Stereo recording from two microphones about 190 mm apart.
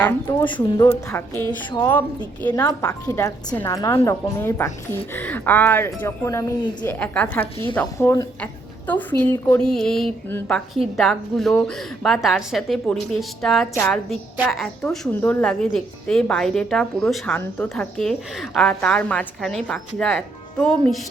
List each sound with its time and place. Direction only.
0.3 s speech: 25° left (ahead or behind)
0.9 s a woman's voice: 10° left (ahead or behind)